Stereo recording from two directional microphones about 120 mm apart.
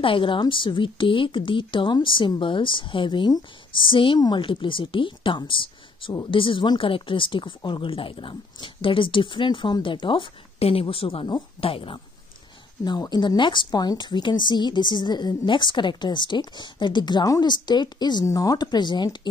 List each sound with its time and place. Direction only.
0.0 s a woman's voice: 45° left (ahead or behind)
12.8 s a woman's voice: 35° left (ahead or behind)